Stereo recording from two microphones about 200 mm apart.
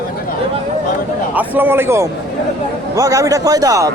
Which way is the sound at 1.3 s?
10° right (ahead or behind).